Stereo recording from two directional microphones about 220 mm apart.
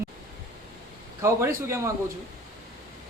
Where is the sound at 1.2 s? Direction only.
10° right (ahead or behind).